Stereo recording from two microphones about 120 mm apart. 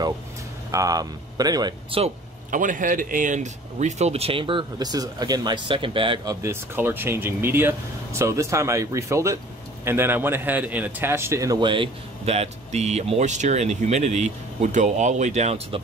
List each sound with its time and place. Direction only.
0.7 s speech: 30° right (ahead or behind)
1.9 s speech: 55° right (ahead or behind)
2.5 s speech: 90° right; by 6.2 s 45° right (ahead or behind)
6.2 s speech: 20° right (ahead or behind)
11.6 s speech: 45° right (ahead or behind); by 15.8 s 65° right (ahead or behind)